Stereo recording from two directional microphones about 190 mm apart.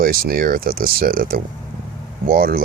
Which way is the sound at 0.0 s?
50° right (ahead or behind).